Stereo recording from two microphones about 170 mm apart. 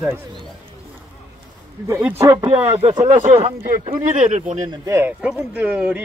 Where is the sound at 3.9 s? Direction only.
45° right (ahead or behind).